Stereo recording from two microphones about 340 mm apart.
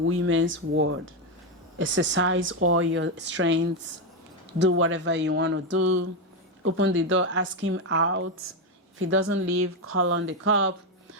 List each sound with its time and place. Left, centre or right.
0.0 s speech: right
4.6 s speech: right